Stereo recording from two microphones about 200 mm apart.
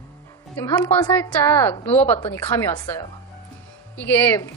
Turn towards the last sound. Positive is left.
turn(degrees=10)  # may be behind; listen again after turning